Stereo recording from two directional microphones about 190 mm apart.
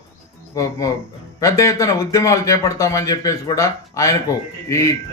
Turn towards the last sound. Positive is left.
turn(degrees=15)  # may be behind; listen again after turning